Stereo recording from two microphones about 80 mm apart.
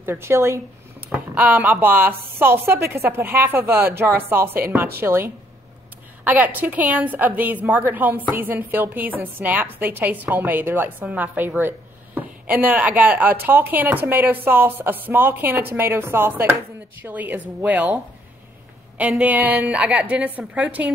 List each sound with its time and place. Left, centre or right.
0.0 s speech: right
1.1 s a woman's voice: right